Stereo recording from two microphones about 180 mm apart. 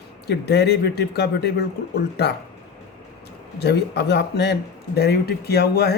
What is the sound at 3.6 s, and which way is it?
Speech, 65° left (ahead or behind).